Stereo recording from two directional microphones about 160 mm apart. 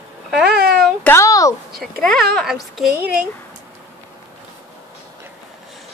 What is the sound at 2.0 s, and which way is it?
A woman's voice, 5° left (ahead or behind).